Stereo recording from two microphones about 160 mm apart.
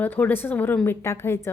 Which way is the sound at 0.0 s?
10° left (ahead or behind).